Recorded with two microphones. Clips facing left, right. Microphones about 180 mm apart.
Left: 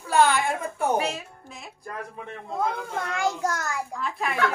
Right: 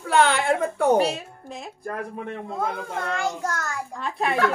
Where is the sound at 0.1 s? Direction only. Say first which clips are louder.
Right 1 dB; 70° right (ahead or behind).